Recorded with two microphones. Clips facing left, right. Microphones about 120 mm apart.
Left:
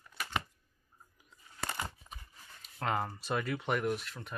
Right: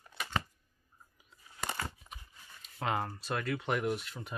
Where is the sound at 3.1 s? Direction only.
10° left (ahead or behind).